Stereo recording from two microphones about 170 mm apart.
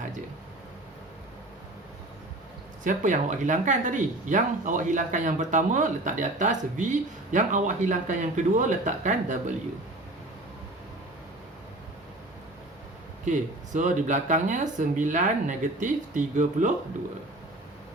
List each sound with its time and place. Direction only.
2.8 s speech: 50° right (ahead or behind)
13.2 s speech: 45° right (ahead or behind)